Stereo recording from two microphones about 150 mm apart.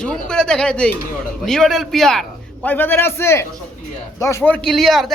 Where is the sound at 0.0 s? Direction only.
5° left (ahead or behind).